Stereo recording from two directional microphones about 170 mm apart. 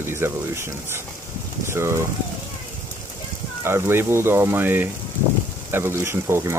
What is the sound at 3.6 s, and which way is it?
Speech, 15° right (ahead or behind).